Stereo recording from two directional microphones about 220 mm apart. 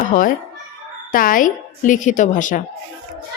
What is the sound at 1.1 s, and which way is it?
A woman's voice, 40° left (ahead or behind).